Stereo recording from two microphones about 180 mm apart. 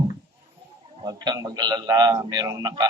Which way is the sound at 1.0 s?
20° right (ahead or behind).